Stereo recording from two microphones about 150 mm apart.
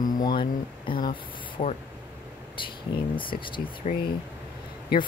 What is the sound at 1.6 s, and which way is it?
Speech, 55° left (ahead or behind).